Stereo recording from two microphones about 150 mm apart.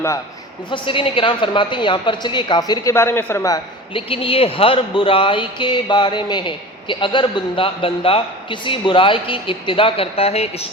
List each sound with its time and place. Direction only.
0.7 s speech: 35° left (ahead or behind); by 3.6 s 20° left (ahead or behind)
3.9 s speech: 35° left (ahead or behind)